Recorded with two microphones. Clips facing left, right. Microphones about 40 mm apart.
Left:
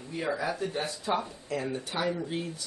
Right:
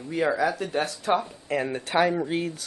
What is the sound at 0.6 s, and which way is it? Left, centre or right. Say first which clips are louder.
Speech: right 5 dB; right.